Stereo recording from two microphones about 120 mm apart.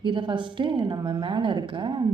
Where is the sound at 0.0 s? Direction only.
40° right (ahead or behind).